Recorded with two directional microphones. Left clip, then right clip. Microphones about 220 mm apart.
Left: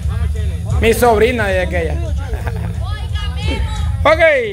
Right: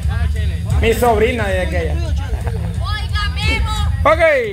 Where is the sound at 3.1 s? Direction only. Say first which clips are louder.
Right 5 dB; 30° right (ahead or behind).